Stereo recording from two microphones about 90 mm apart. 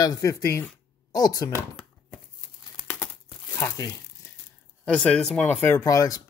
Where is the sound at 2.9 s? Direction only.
30° left (ahead or behind).